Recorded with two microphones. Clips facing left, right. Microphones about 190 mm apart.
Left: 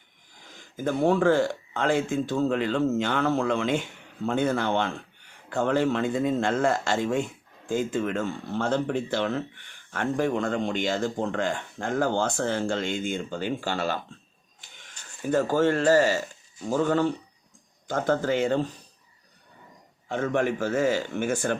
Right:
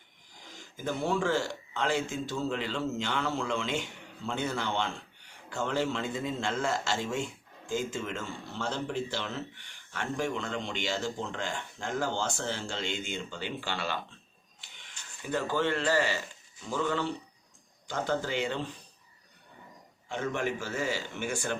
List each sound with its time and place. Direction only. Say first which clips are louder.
0.8 s a man's voice: left 8 dB; 50° left (ahead or behind)
20.1 s speech: left 7 dB; 50° left (ahead or behind)